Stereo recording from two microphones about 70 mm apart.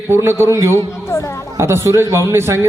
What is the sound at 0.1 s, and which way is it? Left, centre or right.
A man's voice, right.